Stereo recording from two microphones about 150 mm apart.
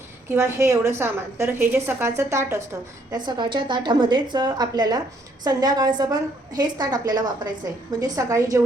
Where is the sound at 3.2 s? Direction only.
30° right (ahead or behind).